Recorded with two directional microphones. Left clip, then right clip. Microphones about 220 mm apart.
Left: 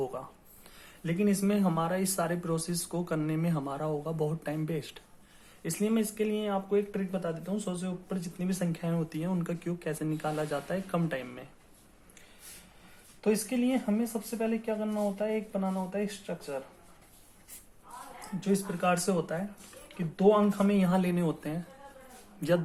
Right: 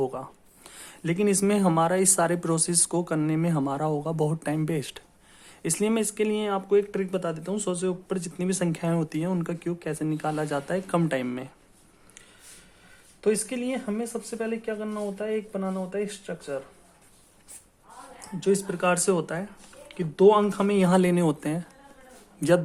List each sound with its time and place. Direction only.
0.0 s a sound: 25° right (ahead or behind)
0.7 s speech: 40° right (ahead or behind)
13.2 s speech: 40° right (ahead or behind)
18.4 s a man's voice: 40° right (ahead or behind)